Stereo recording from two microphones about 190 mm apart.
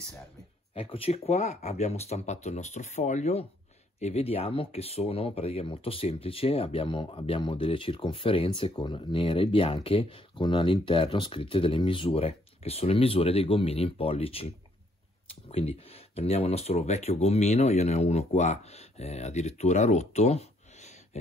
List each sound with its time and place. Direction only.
0.7 s speech: 30° left (ahead or behind)